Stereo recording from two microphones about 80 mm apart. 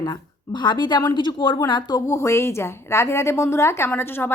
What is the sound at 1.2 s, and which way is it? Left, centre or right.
Speech, left.